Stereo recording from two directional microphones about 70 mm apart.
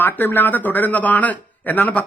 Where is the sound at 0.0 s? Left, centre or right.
Left.